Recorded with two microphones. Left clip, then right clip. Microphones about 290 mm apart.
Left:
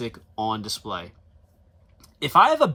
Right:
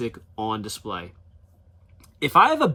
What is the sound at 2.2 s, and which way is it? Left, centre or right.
Speech, centre.